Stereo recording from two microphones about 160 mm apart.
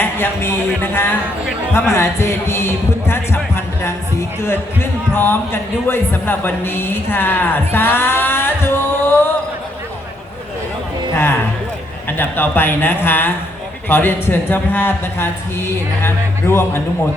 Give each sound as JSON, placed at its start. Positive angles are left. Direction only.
{"t": 0.0, "sound": "a man's voice", "side_deg": 15}
{"t": 12.0, "sound": "speech", "side_deg": 15}